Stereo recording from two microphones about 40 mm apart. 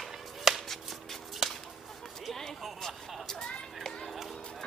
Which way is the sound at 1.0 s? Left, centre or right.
Centre.